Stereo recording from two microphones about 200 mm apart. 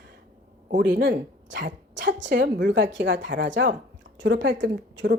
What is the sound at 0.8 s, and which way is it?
A woman's voice, 60° right (ahead or behind).